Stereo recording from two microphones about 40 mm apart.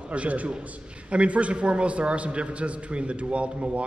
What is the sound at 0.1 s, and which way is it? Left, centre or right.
A man's voice, right.